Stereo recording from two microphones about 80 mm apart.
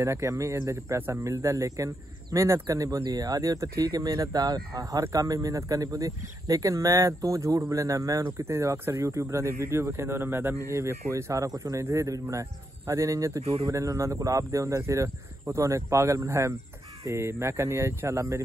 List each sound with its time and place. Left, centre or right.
0.0 s speech: right